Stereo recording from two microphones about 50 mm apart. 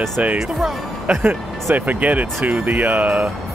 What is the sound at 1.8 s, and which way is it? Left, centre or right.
Speech, right.